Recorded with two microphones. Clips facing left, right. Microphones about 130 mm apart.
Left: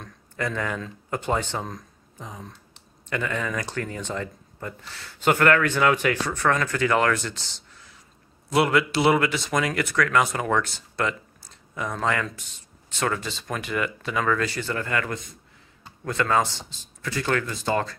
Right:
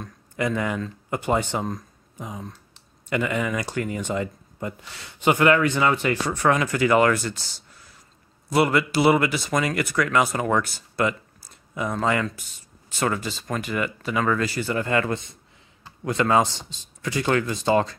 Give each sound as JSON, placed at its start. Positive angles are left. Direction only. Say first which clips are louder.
{"t": 0.0, "sound": "speech", "louder": "right 4 dB", "side_deg": -10}
{"t": 14.9, "sound": "speech", "louder": "right 4 dB", "side_deg": -25}